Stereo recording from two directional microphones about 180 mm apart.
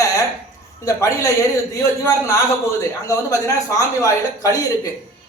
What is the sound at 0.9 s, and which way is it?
Speech, 15° left (ahead or behind).